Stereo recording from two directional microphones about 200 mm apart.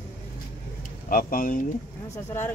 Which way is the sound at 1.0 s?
45° left (ahead or behind).